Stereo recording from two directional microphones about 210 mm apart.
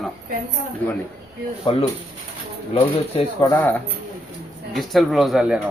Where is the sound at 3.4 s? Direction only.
10° left (ahead or behind).